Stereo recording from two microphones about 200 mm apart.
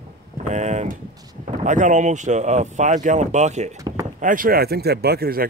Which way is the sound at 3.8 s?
15° right (ahead or behind).